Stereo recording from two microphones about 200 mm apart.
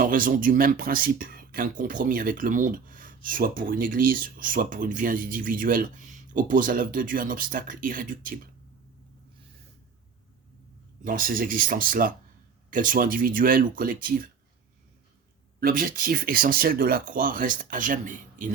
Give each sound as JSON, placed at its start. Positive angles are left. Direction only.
{"t": 0.0, "sound": "speech", "side_deg": -45}
{"t": 11.0, "sound": "speech", "side_deg": -45}
{"t": 15.6, "sound": "speech", "side_deg": -45}